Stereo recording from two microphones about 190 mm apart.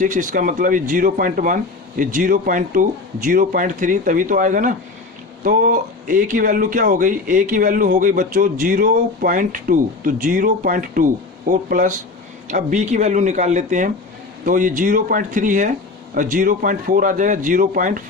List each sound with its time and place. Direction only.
0.0 s a man's voice: 45° right (ahead or behind)